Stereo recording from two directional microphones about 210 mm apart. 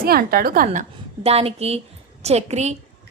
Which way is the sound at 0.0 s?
45° right (ahead or behind).